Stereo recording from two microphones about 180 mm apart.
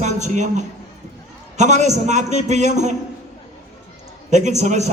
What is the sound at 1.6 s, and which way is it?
A man's voice, 40° right (ahead or behind).